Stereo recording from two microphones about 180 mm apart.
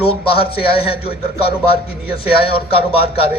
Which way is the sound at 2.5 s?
30° left (ahead or behind).